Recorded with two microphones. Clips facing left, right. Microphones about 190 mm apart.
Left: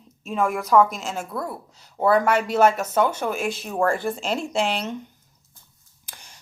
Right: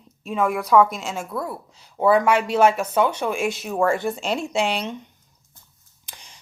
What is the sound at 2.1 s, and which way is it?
Speech, 50° left (ahead or behind).